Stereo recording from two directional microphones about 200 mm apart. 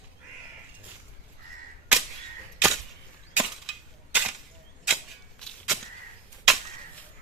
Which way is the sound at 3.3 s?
5° right (ahead or behind).